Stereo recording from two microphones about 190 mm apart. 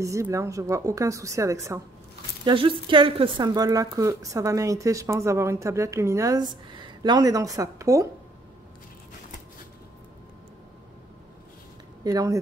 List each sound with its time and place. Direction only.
0.0 s a woman's voice: 15° right (ahead or behind)
2.4 s a woman's voice: 25° right (ahead or behind)
12.0 s speech: 20° right (ahead or behind)